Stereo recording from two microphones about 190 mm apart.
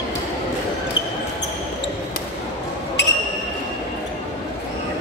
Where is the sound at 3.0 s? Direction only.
65° left (ahead or behind).